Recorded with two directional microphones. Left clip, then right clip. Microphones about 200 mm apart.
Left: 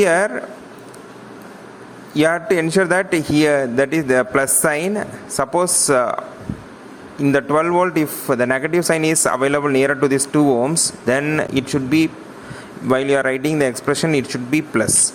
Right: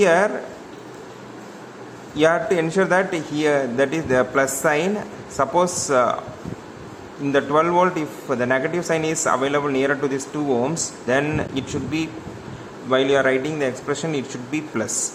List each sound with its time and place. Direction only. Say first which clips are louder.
0.0 s a man's voice: left 1 dB; 25° left (ahead or behind)
2.1 s a man's voice: left 1 dB; 25° left (ahead or behind)
7.3 s a man's voice: left 2 dB; 25° left (ahead or behind)